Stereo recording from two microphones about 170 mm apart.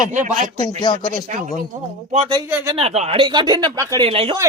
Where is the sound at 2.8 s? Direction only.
35° right (ahead or behind).